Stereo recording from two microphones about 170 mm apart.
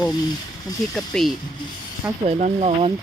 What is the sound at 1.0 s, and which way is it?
Speech, centre (ahead or behind).